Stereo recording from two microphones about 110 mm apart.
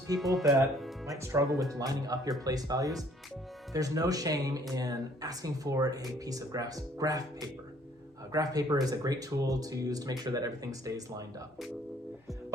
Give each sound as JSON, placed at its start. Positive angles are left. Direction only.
{"t": 0.2, "sound": "speech", "side_deg": 0}
{"t": 1.2, "sound": "speech", "side_deg": -30}